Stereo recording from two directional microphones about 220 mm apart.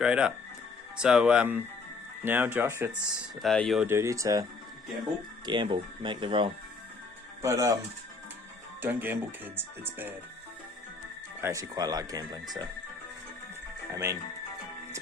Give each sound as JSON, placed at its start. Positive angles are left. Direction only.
{"t": 0.0, "sound": "speech", "side_deg": -5}
{"t": 3.4, "sound": "speech", "side_deg": 0}
{"t": 3.8, "sound": "speech", "side_deg": -10}
{"t": 5.5, "sound": "speech", "side_deg": -20}
{"t": 8.8, "sound": "speech", "side_deg": -10}
{"t": 11.3, "sound": "speech", "side_deg": -15}
{"t": 13.9, "sound": "speech", "side_deg": -15}